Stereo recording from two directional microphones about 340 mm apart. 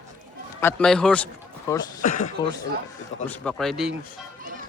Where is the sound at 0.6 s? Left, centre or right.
Centre.